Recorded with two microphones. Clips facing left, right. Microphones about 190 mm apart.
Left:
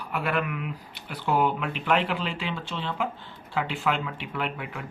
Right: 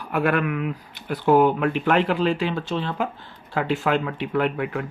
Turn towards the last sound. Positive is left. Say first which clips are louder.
# right 9 dB
turn(degrees=-55)  # may be behind; listen again after turning